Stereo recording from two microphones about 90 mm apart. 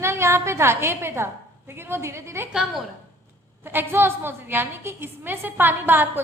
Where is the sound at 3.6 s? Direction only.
25° right (ahead or behind).